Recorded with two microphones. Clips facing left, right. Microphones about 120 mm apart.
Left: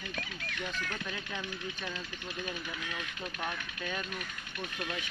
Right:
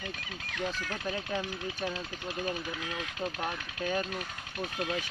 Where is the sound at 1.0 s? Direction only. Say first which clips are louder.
Right 6 dB; 35° right (ahead or behind).